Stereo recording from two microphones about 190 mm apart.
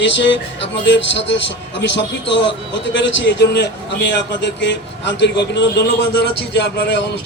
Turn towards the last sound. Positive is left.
turn(degrees=60)  # may be behind; listen again after turning